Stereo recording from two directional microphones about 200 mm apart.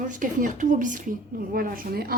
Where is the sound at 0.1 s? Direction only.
40° right (ahead or behind).